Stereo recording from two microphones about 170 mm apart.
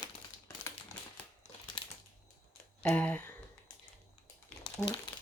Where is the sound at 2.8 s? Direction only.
10° left (ahead or behind).